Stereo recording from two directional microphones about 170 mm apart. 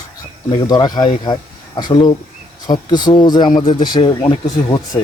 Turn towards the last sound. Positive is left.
turn(degrees=25)  # may be behind; listen again after turning